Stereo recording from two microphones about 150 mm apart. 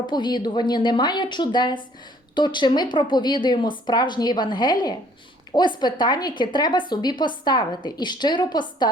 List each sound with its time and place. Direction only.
0.1 s a woman's voice: 30° left (ahead or behind)